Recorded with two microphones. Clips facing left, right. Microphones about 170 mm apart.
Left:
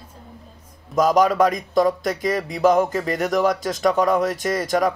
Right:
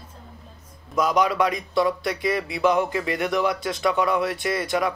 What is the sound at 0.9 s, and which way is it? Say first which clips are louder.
Speech: left 4 dB; 45° left (ahead or behind).